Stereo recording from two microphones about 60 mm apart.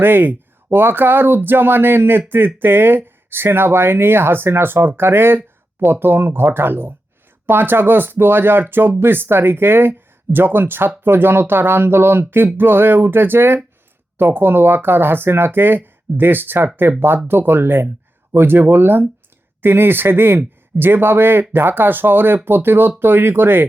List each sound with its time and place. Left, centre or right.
0.0 s speech: right